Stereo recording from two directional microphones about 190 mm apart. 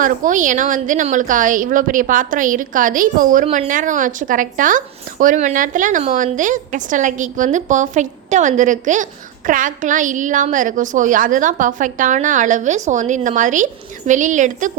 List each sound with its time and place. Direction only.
0.0 s a woman's voice: 45° right (ahead or behind)